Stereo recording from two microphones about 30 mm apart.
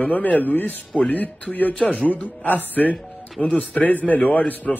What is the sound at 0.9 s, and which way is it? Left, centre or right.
A man's voice, left.